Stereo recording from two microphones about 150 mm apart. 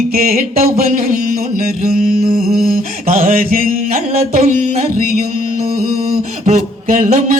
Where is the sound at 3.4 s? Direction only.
70° right (ahead or behind).